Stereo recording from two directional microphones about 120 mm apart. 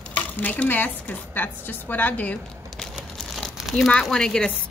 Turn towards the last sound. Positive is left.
turn(degrees=5)  # may be behind; listen again after turning